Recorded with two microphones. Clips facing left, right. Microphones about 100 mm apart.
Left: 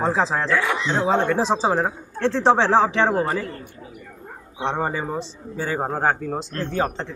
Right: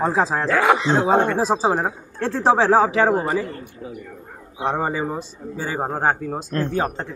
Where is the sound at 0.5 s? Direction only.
90° right.